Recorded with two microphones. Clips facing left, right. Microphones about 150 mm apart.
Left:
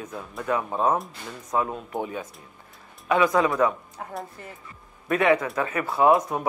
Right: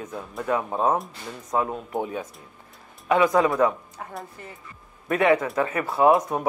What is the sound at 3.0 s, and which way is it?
Speech, 35° right (ahead or behind).